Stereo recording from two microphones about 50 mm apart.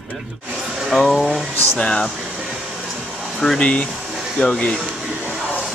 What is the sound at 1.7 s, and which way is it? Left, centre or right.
Speech, centre.